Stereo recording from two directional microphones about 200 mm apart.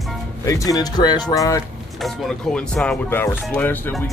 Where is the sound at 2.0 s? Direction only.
Centre (ahead or behind).